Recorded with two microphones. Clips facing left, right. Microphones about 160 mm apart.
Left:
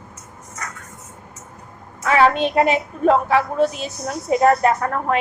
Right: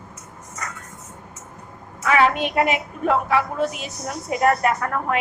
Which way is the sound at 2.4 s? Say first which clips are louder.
Left 4 dB; 30° left (ahead or behind).